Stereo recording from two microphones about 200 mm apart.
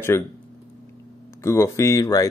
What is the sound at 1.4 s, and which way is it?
Speech, 15° left (ahead or behind).